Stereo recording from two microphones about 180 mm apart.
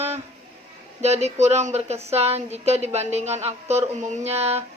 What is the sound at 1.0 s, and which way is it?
Speech, 35° right (ahead or behind).